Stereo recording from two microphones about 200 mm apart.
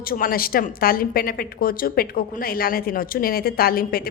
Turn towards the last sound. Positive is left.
turn(degrees=45)  # may be behind; listen again after turning